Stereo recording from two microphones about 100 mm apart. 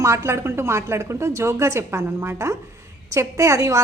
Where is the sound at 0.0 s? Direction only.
30° right (ahead or behind).